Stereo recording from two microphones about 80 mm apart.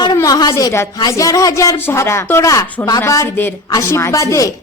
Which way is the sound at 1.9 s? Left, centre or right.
Left.